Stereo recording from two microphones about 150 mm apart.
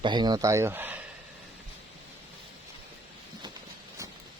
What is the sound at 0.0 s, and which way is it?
Speech, 30° right (ahead or behind).